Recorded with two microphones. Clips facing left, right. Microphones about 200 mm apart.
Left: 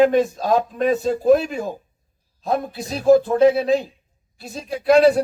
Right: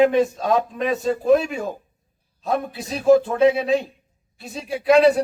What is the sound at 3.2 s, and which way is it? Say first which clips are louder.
Speech: left 2 dB; centre (ahead or behind).